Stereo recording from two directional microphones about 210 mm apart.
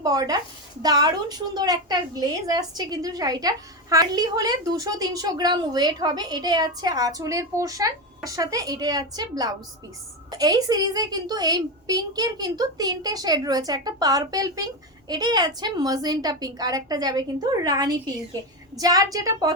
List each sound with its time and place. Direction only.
0.0 s a woman's voice: 15° right (ahead or behind)